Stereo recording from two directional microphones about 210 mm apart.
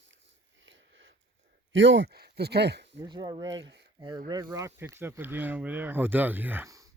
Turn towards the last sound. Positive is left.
turn(degrees=-15)  # may be behind; listen again after turning